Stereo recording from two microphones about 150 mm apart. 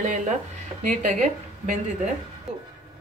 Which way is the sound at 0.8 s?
50° right (ahead or behind).